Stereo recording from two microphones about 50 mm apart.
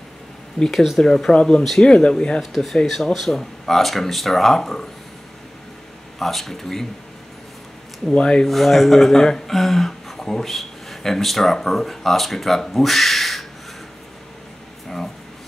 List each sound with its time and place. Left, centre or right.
0.7 s speech: centre
1.6 s speech: centre
1.9 s speech: centre
2.4 s speech: centre
6.1 s speech: centre
8.1 s speech: centre
8.5 s speech: centre